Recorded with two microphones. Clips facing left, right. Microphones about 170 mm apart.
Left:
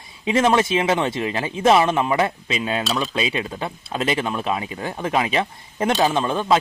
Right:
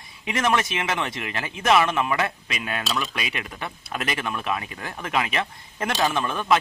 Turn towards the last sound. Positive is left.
turn(degrees=30)  # may be behind; listen again after turning